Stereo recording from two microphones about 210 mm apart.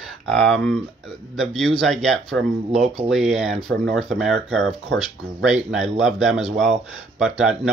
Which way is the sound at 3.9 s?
Centre (ahead or behind).